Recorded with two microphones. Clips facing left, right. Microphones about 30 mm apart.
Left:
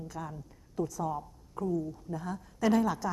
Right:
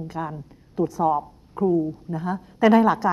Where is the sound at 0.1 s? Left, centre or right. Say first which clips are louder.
Right 10 dB; right.